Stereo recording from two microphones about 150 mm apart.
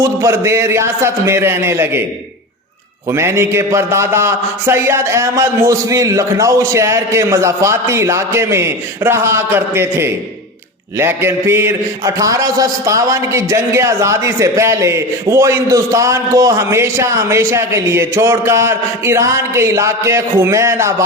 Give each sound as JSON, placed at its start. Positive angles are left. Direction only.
{"t": 0.0, "sound": "a man's voice", "side_deg": -20}
{"t": 3.1, "sound": "a man's voice", "side_deg": -15}